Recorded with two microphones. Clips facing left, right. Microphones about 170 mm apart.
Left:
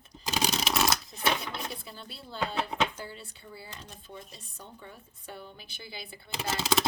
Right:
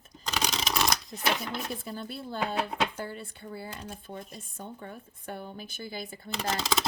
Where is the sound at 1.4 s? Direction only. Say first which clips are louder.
Right 3 dB; 50° right (ahead or behind).